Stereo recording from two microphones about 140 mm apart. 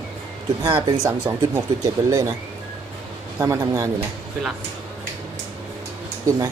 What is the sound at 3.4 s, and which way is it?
Speech, 20° right (ahead or behind).